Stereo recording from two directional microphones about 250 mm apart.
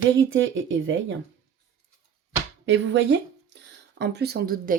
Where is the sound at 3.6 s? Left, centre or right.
Right.